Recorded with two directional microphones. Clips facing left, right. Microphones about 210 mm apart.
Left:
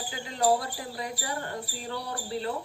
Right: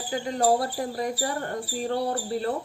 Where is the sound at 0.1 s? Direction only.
45° right (ahead or behind).